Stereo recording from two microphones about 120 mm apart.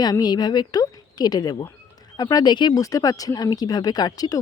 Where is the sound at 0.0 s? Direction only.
35° left (ahead or behind).